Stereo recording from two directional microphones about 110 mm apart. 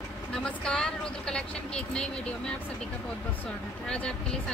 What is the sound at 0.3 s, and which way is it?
Speech, 5° left (ahead or behind).